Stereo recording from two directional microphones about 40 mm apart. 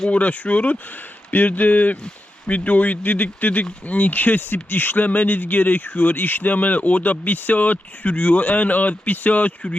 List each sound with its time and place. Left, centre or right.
0.1 s speech: left
5.0 s speech: left